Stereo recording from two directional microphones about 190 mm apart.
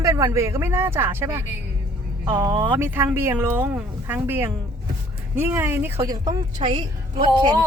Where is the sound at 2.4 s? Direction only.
25° right (ahead or behind).